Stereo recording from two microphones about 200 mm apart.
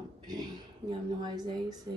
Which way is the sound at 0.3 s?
20° right (ahead or behind).